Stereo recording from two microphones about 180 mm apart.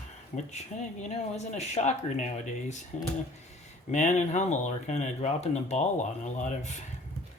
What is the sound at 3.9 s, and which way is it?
Speech, 40° left (ahead or behind).